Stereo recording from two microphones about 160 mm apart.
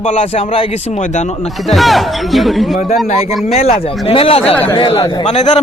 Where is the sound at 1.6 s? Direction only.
Centre (ahead or behind).